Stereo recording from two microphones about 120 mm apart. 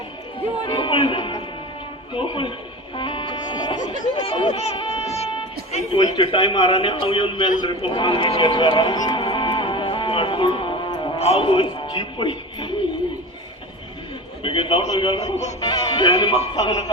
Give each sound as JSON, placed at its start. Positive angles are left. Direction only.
{"t": 0.6, "sound": "a man's voice", "side_deg": 40}
{"t": 2.9, "sound": "music", "side_deg": 45}
{"t": 4.1, "sound": "speech", "side_deg": 40}
{"t": 4.5, "sound": "speech", "side_deg": 60}
{"t": 4.9, "sound": "music", "side_deg": 60}
{"t": 5.9, "sound": "a man's voice", "side_deg": 40}
{"t": 9.2, "sound": "music", "side_deg": 45}
{"t": 11.2, "sound": "speech", "side_deg": 55}
{"t": 14.4, "sound": "a man's voice", "side_deg": 45}
{"t": 15.2, "sound": "speech", "side_deg": 70}
{"t": 15.6, "sound": "music", "side_deg": 40}